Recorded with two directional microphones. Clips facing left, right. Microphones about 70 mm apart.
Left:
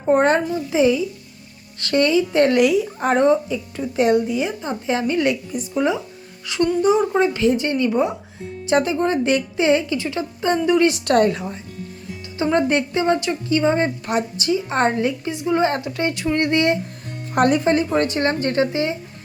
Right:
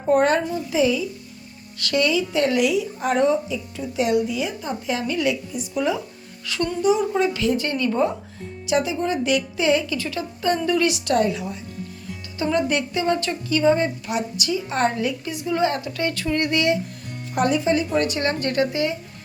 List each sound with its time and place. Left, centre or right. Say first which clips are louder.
0.1 s speech: left 2 dB; left
4.3 s speech: left 3 dB; left
5.7 s speech: left 3 dB; left
6.5 s a woman's voice: left 5 dB; centre
6.8 s a woman's voice: even; left; by 8.1 s centre
8.6 s speech: left 4 dB; left
10.8 s speech: left 4 dB; left
12.4 s speech: left 3 dB; left
14.3 s a woman's voice: left 4 dB; left
17.3 s speech: left 3 dB; left